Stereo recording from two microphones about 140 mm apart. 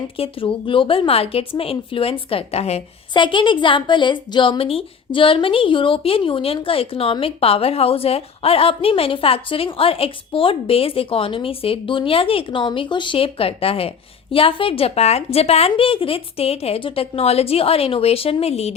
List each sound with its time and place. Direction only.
0.2 s a woman's voice: 40° left (ahead or behind)
3.1 s a woman's voice: 35° left (ahead or behind)